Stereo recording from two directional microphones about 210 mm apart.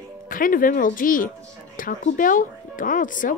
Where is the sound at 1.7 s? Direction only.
40° left (ahead or behind).